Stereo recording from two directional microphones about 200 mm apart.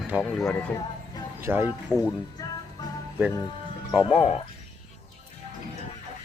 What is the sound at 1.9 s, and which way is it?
Speech, 5° left (ahead or behind).